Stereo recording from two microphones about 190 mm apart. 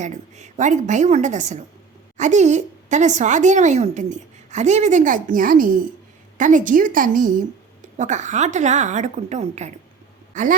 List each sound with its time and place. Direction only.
0.0 s speech: 40° right (ahead or behind)